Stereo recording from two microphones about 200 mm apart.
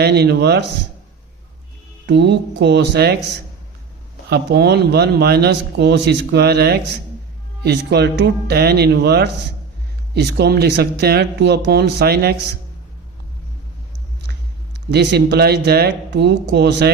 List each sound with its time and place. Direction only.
0.0 s speech: 55° right (ahead or behind)
2.0 s speech: 60° right (ahead or behind)
4.3 s speech: 55° right (ahead or behind)
14.8 s speech: 55° right (ahead or behind)